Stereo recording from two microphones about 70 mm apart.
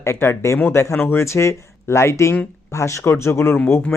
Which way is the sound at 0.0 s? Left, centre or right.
Left.